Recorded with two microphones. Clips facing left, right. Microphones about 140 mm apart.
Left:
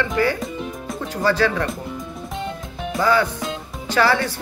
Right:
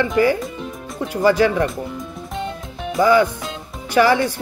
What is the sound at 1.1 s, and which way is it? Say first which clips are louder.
Speech: right 4 dB; 15° right (ahead or behind).